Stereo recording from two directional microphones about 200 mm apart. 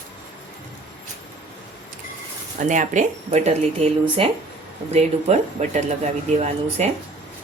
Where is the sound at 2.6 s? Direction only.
40° right (ahead or behind).